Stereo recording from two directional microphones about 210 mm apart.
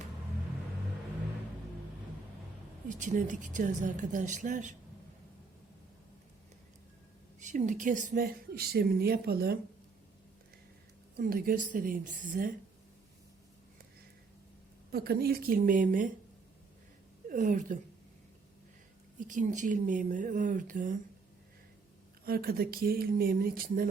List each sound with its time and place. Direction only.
3.0 s speech: 35° right (ahead or behind)
7.3 s a woman's voice: 35° right (ahead or behind)
11.2 s speech: 45° right (ahead or behind)
14.9 s a woman's voice: 45° right (ahead or behind)
17.2 s a woman's voice: 40° right (ahead or behind)
19.2 s speech: 35° right (ahead or behind)
22.2 s a woman's voice: 45° right (ahead or behind)